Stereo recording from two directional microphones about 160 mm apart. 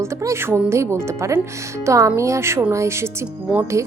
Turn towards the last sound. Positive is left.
turn(degrees=-20)  # may be behind; listen again after turning